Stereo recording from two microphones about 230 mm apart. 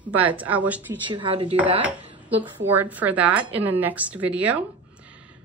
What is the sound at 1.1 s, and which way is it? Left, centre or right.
Speech, right.